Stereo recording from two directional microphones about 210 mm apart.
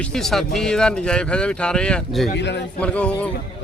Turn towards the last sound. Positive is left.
turn(degrees=5)  # may be behind; listen again after turning